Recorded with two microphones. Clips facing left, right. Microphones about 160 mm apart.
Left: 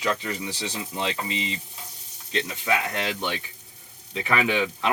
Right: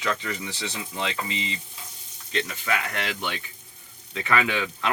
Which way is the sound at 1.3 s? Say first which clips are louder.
Left 2 dB; 20° left (ahead or behind).